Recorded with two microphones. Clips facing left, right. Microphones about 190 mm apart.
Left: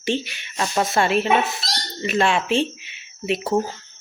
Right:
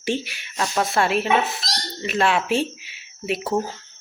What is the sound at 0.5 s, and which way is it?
Speech, 5° left (ahead or behind).